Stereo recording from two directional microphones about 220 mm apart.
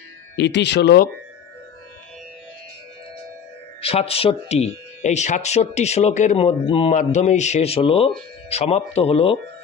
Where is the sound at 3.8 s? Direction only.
25° left (ahead or behind).